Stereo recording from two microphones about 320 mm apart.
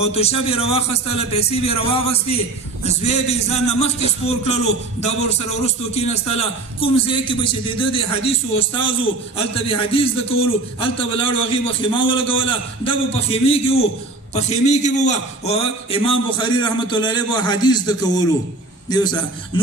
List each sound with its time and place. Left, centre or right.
0.0 s a man's voice: centre